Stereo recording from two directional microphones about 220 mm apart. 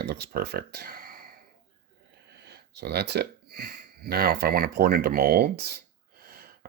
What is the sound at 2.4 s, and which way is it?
Speech, 50° right (ahead or behind).